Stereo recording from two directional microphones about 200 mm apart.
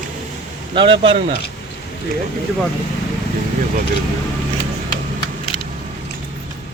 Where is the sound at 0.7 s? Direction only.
25° right (ahead or behind).